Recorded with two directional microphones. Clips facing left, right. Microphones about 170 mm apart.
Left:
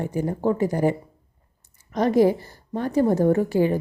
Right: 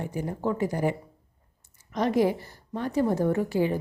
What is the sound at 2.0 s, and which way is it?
A woman's voice, 40° left (ahead or behind).